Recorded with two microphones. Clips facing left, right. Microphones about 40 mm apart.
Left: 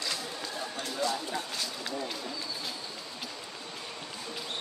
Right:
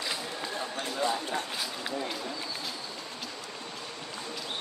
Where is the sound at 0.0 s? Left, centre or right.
Centre.